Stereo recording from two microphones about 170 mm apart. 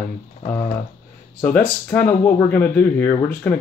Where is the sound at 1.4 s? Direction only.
10° left (ahead or behind).